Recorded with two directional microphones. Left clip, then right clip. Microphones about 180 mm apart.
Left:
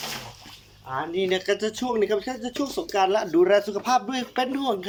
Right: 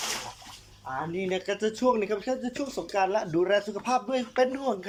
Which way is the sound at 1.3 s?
10° right (ahead or behind).